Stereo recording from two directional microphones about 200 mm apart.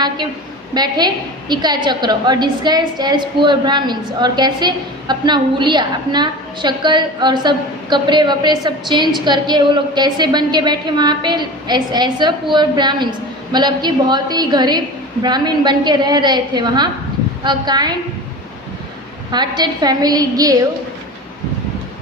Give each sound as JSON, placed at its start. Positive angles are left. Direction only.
{"t": 0.7, "sound": "a woman's voice", "side_deg": -20}
{"t": 19.3, "sound": "a woman's voice", "side_deg": -20}